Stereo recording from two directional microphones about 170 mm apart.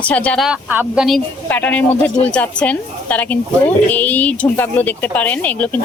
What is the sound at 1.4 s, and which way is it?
A woman's voice, 10° left (ahead or behind).